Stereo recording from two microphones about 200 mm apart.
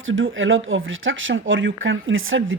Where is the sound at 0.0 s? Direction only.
75° right (ahead or behind).